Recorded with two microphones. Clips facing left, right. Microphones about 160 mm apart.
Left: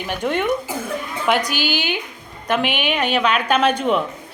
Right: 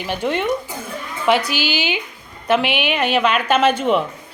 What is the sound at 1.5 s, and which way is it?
Speech, 45° left (ahead or behind).